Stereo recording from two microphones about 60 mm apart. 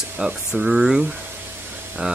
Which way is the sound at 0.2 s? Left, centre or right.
Centre.